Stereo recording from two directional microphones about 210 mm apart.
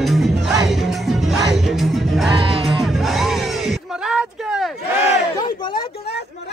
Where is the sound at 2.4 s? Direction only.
25° right (ahead or behind).